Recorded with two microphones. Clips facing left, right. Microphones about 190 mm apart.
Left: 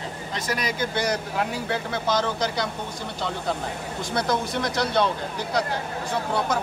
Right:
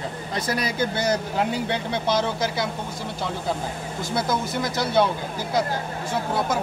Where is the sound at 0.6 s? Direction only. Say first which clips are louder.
Even; 25° right (ahead or behind); by 2.6 s 10° right (ahead or behind).